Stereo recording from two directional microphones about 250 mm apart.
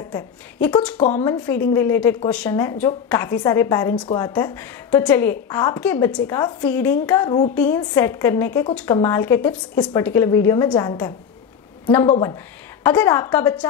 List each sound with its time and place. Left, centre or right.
0.1 s a woman's voice: centre